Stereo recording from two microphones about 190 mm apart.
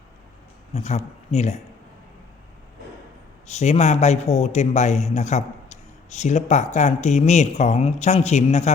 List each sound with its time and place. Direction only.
0.7 s a man's voice: 35° left (ahead or behind)
3.4 s a man's voice: 35° left (ahead or behind)